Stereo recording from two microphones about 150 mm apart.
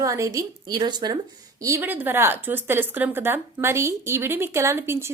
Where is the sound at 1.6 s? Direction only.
15° right (ahead or behind).